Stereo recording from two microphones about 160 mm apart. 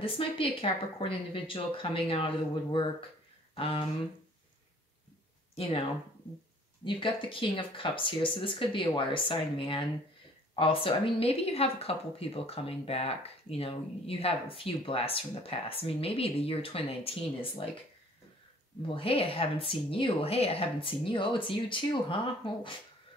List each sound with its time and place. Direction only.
0.0 s speech: 35° left (ahead or behind)
5.6 s speech: 35° left (ahead or behind)
18.9 s speech: 35° left (ahead or behind)